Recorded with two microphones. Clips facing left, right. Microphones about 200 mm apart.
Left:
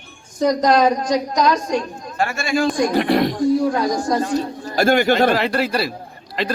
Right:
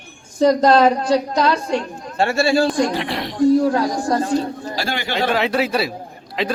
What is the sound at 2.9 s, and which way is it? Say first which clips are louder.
Speech: left 8 dB; 45° left (ahead or behind).